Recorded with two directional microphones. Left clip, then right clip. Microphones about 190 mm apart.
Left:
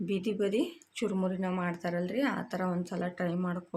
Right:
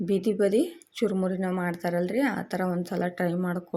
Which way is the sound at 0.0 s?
25° right (ahead or behind).